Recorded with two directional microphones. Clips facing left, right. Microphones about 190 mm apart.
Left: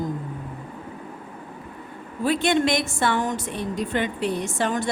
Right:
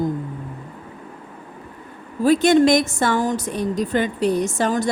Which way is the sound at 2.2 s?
40° right (ahead or behind).